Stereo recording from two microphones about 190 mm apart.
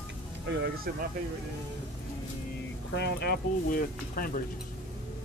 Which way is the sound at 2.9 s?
60° left (ahead or behind).